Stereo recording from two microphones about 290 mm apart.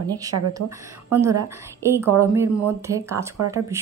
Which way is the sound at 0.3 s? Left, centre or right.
Right.